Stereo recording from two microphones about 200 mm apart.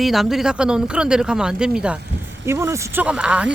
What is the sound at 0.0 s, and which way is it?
Speech, centre (ahead or behind).